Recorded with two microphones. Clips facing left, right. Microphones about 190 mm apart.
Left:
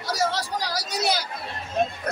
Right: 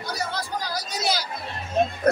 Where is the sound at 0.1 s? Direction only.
90° left; by 1.1 s 70° left (ahead or behind).